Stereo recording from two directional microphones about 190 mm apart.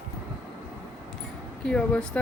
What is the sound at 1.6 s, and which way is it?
Speech, 5° left (ahead or behind).